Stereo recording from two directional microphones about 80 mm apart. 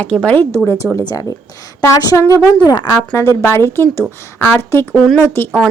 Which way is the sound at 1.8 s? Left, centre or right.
Left.